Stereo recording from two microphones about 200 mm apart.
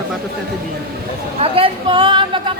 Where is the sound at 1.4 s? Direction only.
25° right (ahead or behind).